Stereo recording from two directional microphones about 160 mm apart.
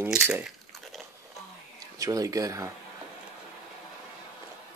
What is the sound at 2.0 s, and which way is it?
Speech, 20° right (ahead or behind).